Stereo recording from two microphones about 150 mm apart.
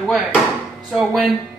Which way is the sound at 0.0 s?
Centre (ahead or behind).